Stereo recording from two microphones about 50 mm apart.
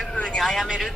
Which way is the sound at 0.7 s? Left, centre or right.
Centre.